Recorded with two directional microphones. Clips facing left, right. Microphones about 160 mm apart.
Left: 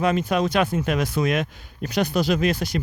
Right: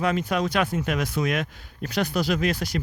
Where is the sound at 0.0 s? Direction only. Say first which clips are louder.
Left 3 dB; 25° left (ahead or behind).